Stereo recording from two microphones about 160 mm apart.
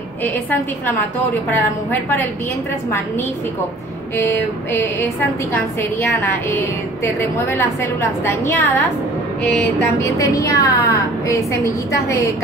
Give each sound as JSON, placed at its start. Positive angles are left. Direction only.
{"t": 0.2, "sound": "a woman's voice", "side_deg": 10}
{"t": 4.2, "sound": "a woman's voice", "side_deg": 15}
{"t": 9.9, "sound": "a woman's voice", "side_deg": 20}